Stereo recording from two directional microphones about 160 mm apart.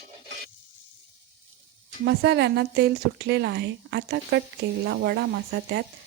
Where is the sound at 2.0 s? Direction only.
90° right.